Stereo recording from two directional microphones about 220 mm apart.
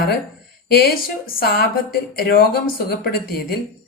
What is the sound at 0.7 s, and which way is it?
A woman's voice, 45° left (ahead or behind).